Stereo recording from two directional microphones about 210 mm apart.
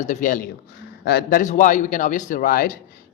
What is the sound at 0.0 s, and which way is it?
Speech, 35° left (ahead or behind).